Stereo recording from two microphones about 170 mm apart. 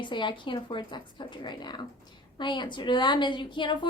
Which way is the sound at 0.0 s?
30° left (ahead or behind).